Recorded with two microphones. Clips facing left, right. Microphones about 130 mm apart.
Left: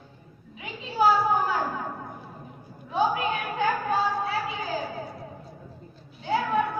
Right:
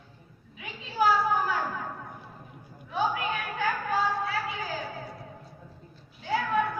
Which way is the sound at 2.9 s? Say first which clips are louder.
Left 4 dB; 25° left (ahead or behind).